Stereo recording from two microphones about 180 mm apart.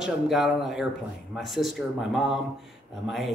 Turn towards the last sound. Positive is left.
turn(degrees=0)  # may be behind; listen again after turning